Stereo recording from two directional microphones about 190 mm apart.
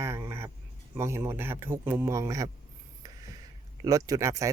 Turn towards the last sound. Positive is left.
turn(degrees=-15)  # may be behind; listen again after turning